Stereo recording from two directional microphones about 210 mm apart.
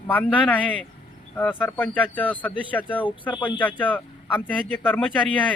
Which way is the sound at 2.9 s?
25° left (ahead or behind).